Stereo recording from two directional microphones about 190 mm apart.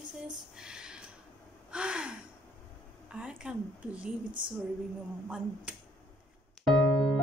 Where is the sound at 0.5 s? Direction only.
5° right (ahead or behind).